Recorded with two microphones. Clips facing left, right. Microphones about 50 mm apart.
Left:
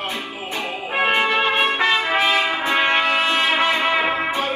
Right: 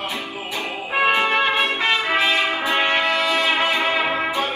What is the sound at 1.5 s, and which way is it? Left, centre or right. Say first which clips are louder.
Trumpet: left 2 dB; left.